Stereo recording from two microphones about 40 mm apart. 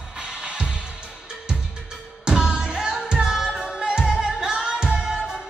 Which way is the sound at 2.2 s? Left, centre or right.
Centre.